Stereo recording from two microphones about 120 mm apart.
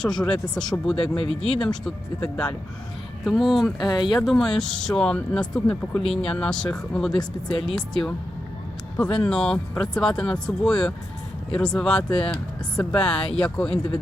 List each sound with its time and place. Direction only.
0.0 s speech: 5° left (ahead or behind)
1.0 s speech: 45° left (ahead or behind)
1.5 s speech: 10° left (ahead or behind)
3.8 s speech: 35° left (ahead or behind)
4.2 s speech: centre (ahead or behind)
12.1 s speech: 45° left (ahead or behind)
12.7 s speech: 10° left (ahead or behind)